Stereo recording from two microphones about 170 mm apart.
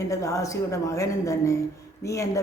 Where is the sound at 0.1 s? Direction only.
20° left (ahead or behind).